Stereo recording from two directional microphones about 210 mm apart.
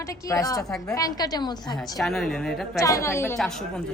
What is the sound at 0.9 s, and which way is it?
Speech, 15° left (ahead or behind).